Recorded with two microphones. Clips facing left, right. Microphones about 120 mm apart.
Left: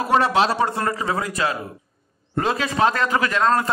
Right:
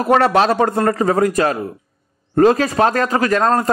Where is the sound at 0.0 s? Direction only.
55° right (ahead or behind).